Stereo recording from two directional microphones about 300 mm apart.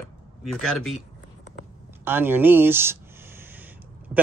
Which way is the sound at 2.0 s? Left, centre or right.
Centre.